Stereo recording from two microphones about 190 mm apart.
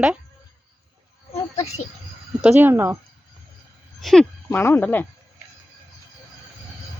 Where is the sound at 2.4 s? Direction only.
5° right (ahead or behind).